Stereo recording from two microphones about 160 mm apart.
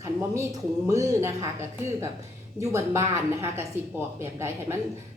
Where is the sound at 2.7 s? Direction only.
15° right (ahead or behind).